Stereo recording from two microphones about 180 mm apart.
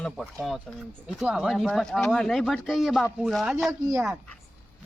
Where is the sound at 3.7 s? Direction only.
20° right (ahead or behind).